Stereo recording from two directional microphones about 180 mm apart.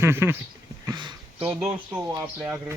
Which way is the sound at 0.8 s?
25° right (ahead or behind).